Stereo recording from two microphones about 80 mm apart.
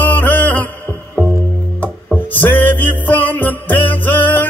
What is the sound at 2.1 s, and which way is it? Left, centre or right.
Music, left.